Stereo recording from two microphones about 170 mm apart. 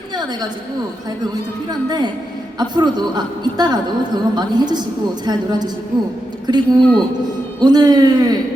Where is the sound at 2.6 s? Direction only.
25° right (ahead or behind).